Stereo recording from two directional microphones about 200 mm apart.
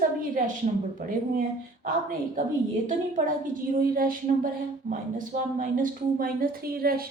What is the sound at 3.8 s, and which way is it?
A woman's voice, 45° right (ahead or behind).